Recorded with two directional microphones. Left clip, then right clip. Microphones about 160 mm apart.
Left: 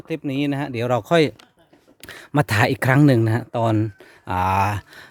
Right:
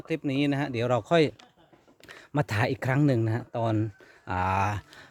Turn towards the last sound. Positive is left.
turn(degrees=30)  # may be behind; listen again after turning